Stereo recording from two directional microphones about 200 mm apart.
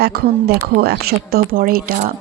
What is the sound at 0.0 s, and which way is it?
Speech, 50° right (ahead or behind).